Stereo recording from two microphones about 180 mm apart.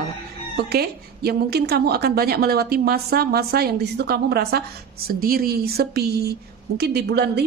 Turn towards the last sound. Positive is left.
turn(degrees=-65)  # may be behind; listen again after turning